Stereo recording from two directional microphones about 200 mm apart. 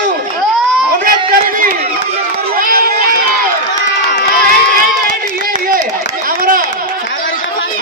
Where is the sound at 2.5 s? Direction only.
45° right (ahead or behind).